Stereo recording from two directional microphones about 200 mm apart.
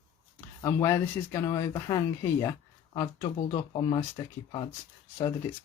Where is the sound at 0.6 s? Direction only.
15° left (ahead or behind).